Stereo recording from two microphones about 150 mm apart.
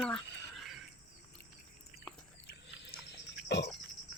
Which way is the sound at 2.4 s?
90° left.